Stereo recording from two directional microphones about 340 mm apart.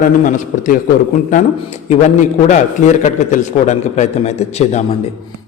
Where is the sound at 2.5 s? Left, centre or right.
Left.